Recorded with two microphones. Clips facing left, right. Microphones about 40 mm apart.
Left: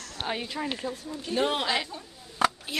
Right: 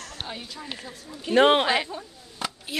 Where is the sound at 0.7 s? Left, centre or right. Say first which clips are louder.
Left 5 dB; centre.